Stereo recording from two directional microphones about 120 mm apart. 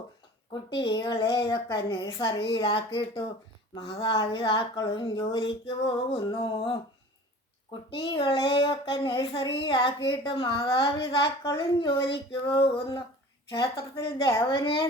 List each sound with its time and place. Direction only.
0.7 s speech: 40° left (ahead or behind)
1.9 s speech: 40° left (ahead or behind)
12.0 s speech: 45° left (ahead or behind)
13.5 s a woman's voice: 30° left (ahead or behind)
14.0 s speech: 45° left (ahead or behind)